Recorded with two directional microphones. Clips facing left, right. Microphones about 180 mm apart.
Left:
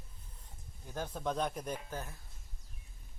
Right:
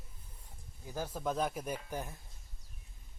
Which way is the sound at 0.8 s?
5° right (ahead or behind).